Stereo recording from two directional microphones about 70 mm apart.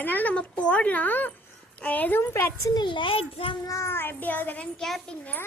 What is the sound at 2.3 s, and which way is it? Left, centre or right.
Speech, left.